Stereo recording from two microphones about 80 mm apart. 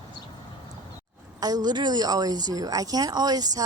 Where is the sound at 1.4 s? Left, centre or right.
Right.